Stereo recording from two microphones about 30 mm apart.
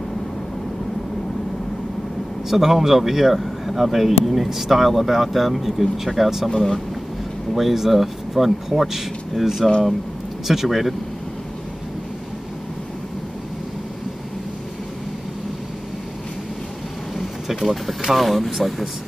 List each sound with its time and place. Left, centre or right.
2.5 s speech: centre
6.5 s speech: centre
7.5 s speech: centre
17.5 s speech: centre